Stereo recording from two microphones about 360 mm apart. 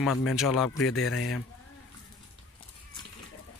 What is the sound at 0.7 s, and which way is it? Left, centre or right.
Speech, left.